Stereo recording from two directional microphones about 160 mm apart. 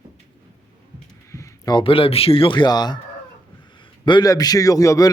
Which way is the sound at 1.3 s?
20° left (ahead or behind).